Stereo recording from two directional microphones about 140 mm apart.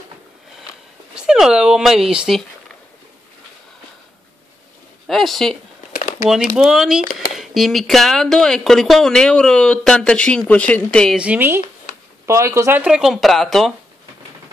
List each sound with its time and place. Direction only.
1.1 s speech: 5° right (ahead or behind)
5.0 s speech: centre (ahead or behind)
11.1 s speech: 10° right (ahead or behind)
12.8 s speech: 5° right (ahead or behind)